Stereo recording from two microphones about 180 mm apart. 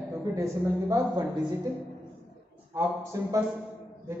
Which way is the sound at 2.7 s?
15° right (ahead or behind).